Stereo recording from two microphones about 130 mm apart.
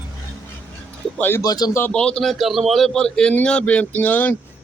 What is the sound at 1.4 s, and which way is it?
Speech, 25° left (ahead or behind).